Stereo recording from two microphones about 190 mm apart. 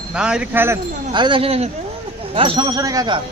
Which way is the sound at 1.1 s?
25° right (ahead or behind).